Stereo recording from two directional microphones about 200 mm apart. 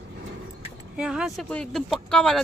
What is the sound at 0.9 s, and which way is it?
Speech, 5° right (ahead or behind).